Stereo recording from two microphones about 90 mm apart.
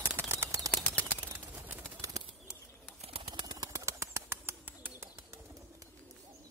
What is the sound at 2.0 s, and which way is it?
Bird, 35° right (ahead or behind).